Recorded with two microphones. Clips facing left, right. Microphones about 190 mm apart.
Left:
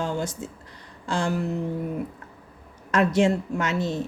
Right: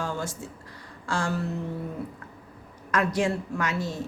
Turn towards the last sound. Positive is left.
turn(degrees=20)  # may be behind; listen again after turning